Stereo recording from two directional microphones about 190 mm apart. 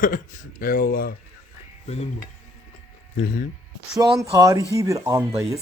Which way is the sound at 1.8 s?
35° left (ahead or behind).